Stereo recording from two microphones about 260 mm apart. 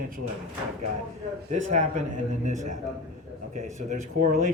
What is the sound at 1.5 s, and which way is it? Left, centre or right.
Speech, right.